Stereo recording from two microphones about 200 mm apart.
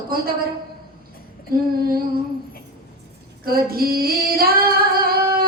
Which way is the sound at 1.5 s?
50° right (ahead or behind).